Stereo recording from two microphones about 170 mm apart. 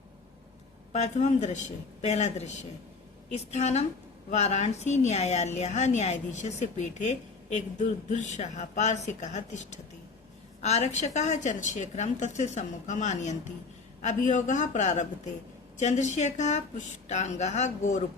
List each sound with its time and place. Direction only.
0.9 s a woman's voice: 45° left (ahead or behind)